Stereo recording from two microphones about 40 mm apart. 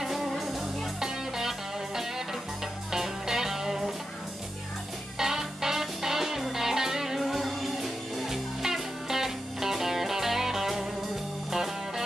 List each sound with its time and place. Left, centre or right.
0.0 s music: centre
2.9 s music: centre
5.2 s music: centre